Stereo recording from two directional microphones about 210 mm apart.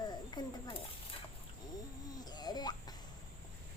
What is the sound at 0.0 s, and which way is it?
Snake, 20° left (ahead or behind).